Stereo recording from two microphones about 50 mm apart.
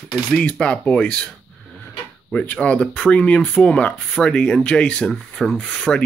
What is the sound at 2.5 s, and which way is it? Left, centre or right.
Speech, left.